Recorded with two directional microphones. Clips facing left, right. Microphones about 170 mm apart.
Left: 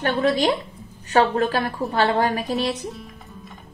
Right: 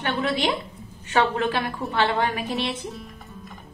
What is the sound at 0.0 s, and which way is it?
A woman's voice, 40° left (ahead or behind).